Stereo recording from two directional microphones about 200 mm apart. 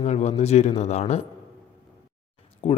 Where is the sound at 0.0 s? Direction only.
35° left (ahead or behind).